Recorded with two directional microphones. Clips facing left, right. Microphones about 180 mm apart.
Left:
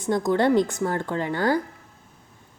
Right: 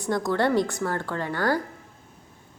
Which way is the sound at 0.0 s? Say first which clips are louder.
Left 3 dB; 20° left (ahead or behind).